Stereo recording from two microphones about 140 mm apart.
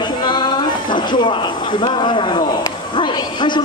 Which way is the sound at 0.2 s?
30° left (ahead or behind).